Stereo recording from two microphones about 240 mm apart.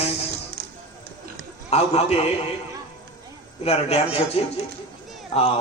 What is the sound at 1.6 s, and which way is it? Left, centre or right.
Speech, left.